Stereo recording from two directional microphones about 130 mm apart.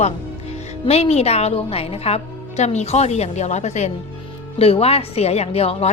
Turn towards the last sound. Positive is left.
turn(degrees=50)  # may be behind; listen again after turning